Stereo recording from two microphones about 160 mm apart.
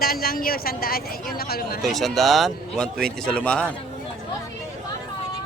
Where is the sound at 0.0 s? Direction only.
70° left (ahead or behind).